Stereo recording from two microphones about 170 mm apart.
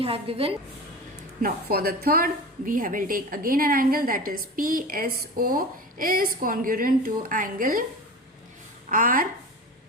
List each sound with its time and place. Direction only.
0.0 s a woman's voice: 35° right (ahead or behind)
1.4 s a woman's voice: 60° right (ahead or behind)
8.9 s a woman's voice: 55° right (ahead or behind)